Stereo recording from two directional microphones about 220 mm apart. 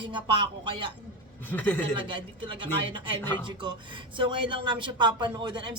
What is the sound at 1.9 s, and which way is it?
Speech, 20° right (ahead or behind).